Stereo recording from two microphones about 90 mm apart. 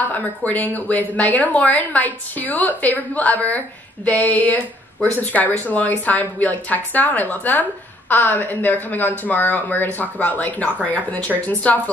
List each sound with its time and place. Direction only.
0.0 s a woman's voice: 20° left (ahead or behind)
5.7 s a woman's voice: 20° left (ahead or behind)